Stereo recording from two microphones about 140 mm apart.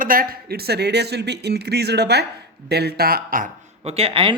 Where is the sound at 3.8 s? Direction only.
45° right (ahead or behind).